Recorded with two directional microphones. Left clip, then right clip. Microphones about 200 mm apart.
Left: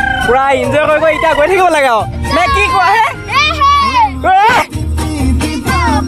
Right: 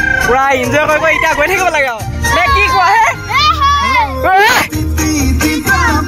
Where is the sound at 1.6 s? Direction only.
30° left (ahead or behind).